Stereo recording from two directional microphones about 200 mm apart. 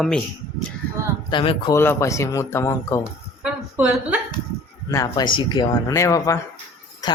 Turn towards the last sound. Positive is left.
turn(degrees=15)  # may be behind; listen again after turning